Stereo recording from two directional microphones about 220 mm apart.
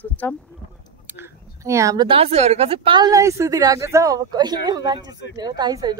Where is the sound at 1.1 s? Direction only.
15° right (ahead or behind).